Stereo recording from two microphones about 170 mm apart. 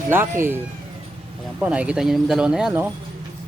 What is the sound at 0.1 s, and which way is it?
Speech, 15° right (ahead or behind).